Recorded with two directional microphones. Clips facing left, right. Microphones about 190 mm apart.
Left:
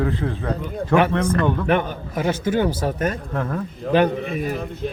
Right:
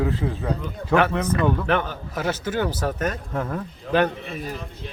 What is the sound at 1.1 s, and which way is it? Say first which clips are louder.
Speech: left 2 dB; 5° right (ahead or behind).